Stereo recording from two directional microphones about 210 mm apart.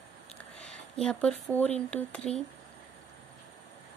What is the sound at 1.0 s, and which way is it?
Speech, 5° left (ahead or behind).